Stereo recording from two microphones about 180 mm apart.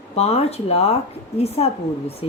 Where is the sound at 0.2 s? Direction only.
35° left (ahead or behind).